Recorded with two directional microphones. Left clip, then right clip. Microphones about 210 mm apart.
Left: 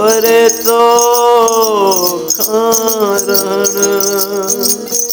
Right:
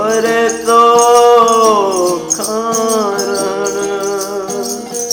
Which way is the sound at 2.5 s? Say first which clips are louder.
Left 3 dB; 50° left (ahead or behind).